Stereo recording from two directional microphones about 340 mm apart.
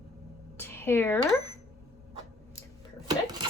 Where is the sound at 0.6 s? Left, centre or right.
Centre.